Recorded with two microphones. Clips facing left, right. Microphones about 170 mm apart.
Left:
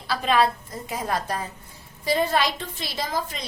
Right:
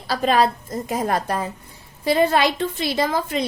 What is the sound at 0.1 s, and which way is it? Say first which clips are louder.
A woman's voice: right 3 dB; 40° right (ahead or behind).